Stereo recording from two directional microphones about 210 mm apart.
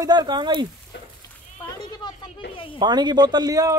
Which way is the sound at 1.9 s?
20° left (ahead or behind).